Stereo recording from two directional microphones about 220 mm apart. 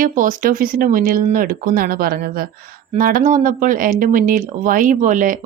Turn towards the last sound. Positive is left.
turn(degrees=-35)  # may be behind; listen again after turning